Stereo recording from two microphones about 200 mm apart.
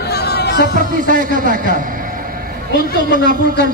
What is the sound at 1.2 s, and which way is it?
Speech, 40° right (ahead or behind).